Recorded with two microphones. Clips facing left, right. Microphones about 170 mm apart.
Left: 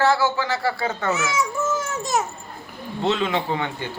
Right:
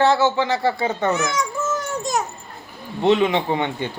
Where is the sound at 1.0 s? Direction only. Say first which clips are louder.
Even; 5° left (ahead or behind).